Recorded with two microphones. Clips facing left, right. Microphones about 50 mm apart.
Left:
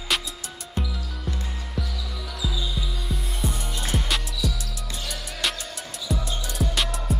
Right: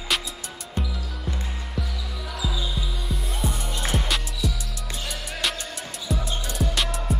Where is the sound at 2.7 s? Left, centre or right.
Centre.